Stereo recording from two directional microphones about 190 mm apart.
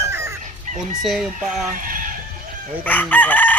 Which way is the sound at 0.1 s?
15° right (ahead or behind).